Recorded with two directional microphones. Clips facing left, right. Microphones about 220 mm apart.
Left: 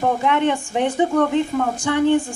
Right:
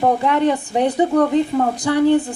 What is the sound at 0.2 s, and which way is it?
A woman's voice, 35° right (ahead or behind).